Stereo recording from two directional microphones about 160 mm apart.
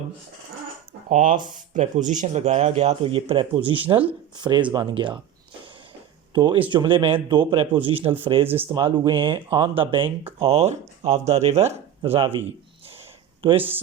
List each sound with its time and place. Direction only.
1.1 s speech: 55° right (ahead or behind); by 5.1 s 30° right (ahead or behind)
6.3 s speech: 30° right (ahead or behind)
13.6 s speech: 10° right (ahead or behind)